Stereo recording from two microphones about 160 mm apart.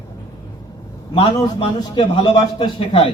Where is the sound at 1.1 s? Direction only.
35° left (ahead or behind).